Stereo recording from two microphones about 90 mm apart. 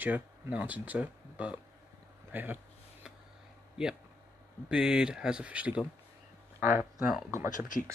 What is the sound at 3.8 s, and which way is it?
Speech, 10° right (ahead or behind).